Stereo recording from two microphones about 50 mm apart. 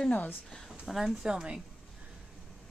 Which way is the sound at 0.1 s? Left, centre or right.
Left.